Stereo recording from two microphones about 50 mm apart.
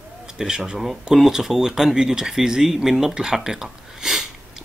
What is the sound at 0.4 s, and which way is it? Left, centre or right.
Speech, centre.